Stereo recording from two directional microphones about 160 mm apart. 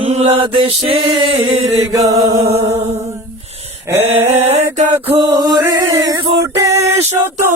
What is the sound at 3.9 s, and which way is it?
Chant, 15° right (ahead or behind).